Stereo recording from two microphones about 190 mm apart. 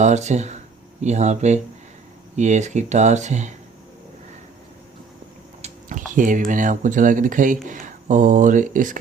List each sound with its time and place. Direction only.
0.0 s speech: 40° right (ahead or behind)
6.1 s speech: 45° right (ahead or behind)